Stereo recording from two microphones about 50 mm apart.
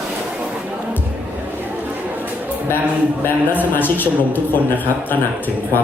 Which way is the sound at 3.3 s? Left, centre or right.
Left.